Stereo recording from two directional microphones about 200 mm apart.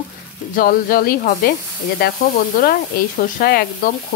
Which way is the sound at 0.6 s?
45° left (ahead or behind).